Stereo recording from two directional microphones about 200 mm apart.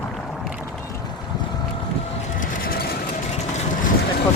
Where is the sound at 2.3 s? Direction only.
45° left (ahead or behind).